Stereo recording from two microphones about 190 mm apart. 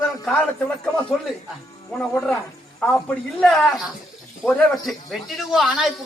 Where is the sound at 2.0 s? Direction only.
5° left (ahead or behind).